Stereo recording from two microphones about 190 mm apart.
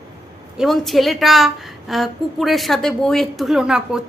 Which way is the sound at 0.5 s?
Centre (ahead or behind).